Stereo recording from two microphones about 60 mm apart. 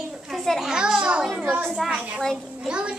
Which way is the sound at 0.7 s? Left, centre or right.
Centre.